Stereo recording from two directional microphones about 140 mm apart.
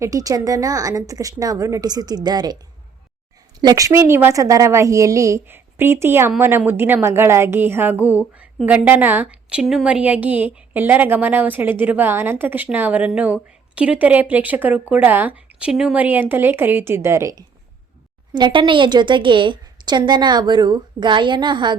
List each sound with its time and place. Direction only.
0.0 s a woman's voice: 25° right (ahead or behind)
3.6 s a woman's voice: 25° right (ahead or behind)
18.3 s a woman's voice: 35° right (ahead or behind)